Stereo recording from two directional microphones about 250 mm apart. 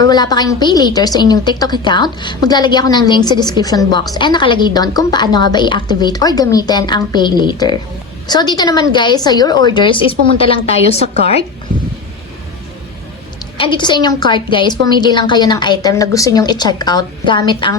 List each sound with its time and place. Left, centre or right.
0.1 s a woman's voice: centre
13.6 s a woman's voice: centre